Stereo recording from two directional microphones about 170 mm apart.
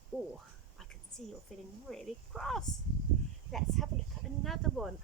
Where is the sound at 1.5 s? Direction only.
5° left (ahead or behind).